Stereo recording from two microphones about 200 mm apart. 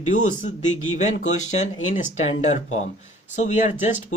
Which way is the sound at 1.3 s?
90° left.